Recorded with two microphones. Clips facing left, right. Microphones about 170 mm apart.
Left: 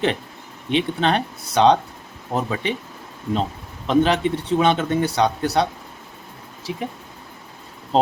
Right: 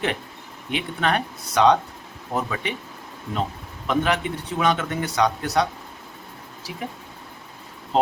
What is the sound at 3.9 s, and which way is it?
Speech, 30° left (ahead or behind).